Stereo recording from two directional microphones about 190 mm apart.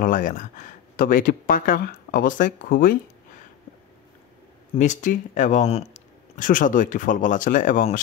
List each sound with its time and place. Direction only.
0.0 s speech: 45° left (ahead or behind)
4.7 s speech: 40° left (ahead or behind)